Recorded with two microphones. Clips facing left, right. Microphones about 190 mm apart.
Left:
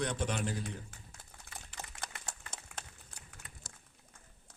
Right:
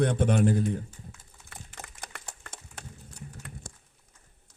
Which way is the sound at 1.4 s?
60° right (ahead or behind).